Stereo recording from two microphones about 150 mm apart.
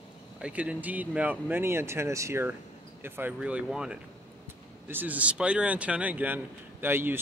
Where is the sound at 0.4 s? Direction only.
10° right (ahead or behind).